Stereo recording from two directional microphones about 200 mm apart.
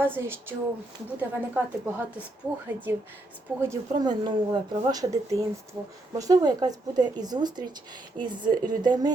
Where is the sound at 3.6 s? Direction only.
15° right (ahead or behind).